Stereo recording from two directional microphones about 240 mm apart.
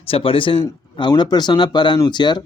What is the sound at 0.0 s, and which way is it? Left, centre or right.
Speech, left.